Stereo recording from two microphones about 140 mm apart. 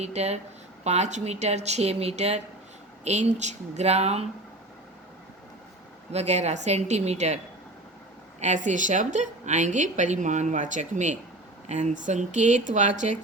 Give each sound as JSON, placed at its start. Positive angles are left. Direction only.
{"t": 0.0, "sound": "speech", "side_deg": -50}
{"t": 6.1, "sound": "speech", "side_deg": -50}
{"t": 8.4, "sound": "a woman's voice", "side_deg": -60}